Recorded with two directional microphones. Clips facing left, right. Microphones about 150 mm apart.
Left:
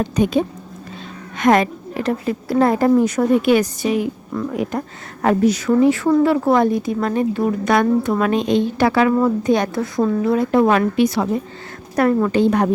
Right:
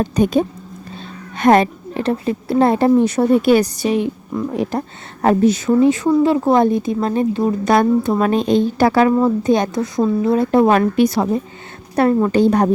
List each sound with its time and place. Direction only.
0.0 s speech: 40° right (ahead or behind)
1.4 s speech: 30° right (ahead or behind)
9.2 s speech: 25° right (ahead or behind)
10.2 s speech: 30° right (ahead or behind)
11.9 s speech: 25° right (ahead or behind)
12.3 s speech: 35° right (ahead or behind)